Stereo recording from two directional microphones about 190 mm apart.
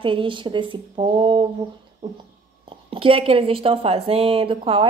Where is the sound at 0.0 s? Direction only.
25° right (ahead or behind).